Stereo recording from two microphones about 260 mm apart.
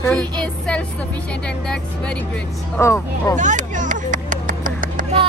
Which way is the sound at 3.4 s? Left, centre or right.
Right.